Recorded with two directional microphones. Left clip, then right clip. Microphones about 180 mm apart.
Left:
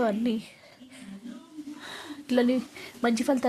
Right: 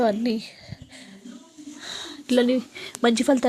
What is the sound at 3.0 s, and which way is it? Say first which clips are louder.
Speech: right 6 dB; 25° right (ahead or behind).